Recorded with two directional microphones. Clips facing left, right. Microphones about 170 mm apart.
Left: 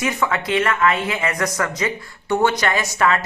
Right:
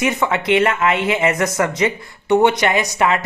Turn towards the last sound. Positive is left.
turn(degrees=-20)  # may be behind; listen again after turning